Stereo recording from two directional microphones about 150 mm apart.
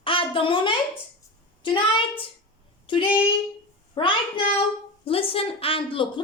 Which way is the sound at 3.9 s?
35° left (ahead or behind).